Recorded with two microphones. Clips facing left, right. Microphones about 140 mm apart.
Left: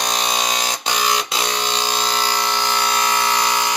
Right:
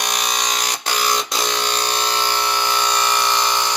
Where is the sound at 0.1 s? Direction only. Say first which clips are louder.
Left 2 dB; 30° left (ahead or behind).